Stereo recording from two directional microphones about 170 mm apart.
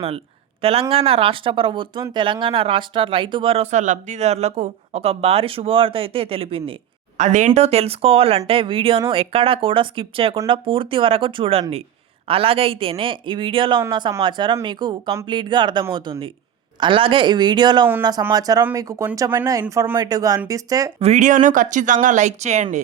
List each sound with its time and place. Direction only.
0.6 s speech: 35° right (ahead or behind)
7.2 s speech: 45° right (ahead or behind); by 20.9 s 20° right (ahead or behind)
21.0 s speech: 45° right (ahead or behind)